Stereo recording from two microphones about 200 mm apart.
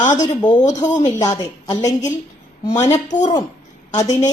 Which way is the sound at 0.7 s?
20° left (ahead or behind).